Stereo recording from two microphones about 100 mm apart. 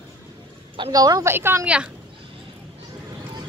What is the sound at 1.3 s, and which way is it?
Speech, 25° right (ahead or behind).